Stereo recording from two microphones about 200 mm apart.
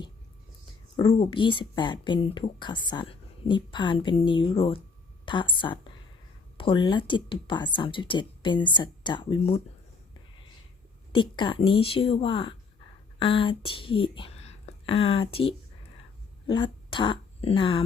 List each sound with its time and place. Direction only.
0.9 s speech: 25° left (ahead or behind)
11.1 s speech: 25° left (ahead or behind)